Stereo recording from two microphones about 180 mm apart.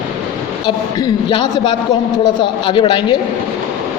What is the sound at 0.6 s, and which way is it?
A woman's voice, 25° left (ahead or behind).